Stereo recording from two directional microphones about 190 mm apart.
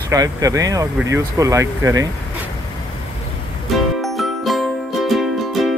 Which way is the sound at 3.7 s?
Centre (ahead or behind).